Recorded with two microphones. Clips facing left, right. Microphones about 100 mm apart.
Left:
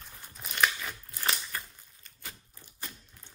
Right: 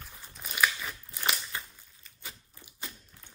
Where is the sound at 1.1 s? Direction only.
15° right (ahead or behind).